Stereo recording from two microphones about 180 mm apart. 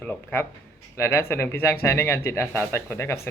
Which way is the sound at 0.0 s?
10° left (ahead or behind).